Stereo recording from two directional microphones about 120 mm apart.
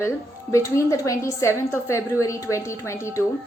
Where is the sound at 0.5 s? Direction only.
25° left (ahead or behind).